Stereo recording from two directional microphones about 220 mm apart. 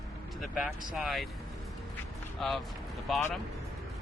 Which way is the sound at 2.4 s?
Centre (ahead or behind).